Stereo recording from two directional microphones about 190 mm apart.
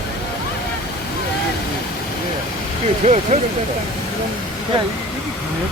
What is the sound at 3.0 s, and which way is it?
Speech, 35° right (ahead or behind).